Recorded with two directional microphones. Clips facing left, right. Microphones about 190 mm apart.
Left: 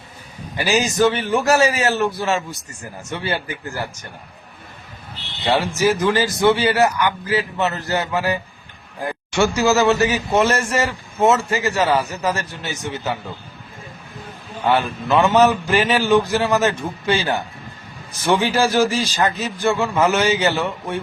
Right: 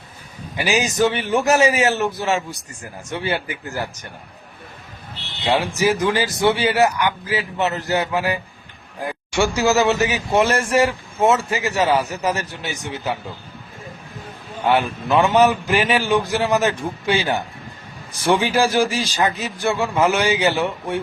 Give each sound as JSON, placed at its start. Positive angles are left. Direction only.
{"t": 0.5, "sound": "a man's voice", "side_deg": -15}
{"t": 5.5, "sound": "a man's voice", "side_deg": -15}
{"t": 14.6, "sound": "a man's voice", "side_deg": -15}
{"t": 18.5, "sound": "a man's voice", "side_deg": -15}